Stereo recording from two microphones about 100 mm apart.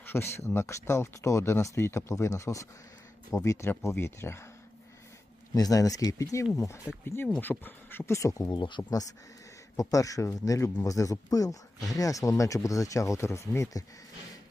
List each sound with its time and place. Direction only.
0.0 s speech: 25° left (ahead or behind)
5.5 s speech: 35° left (ahead or behind)
8.4 s speech: 50° left (ahead or behind)
8.8 s speech: 35° left (ahead or behind)